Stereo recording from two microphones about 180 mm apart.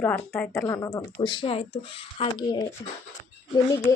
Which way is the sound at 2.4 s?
20° left (ahead or behind).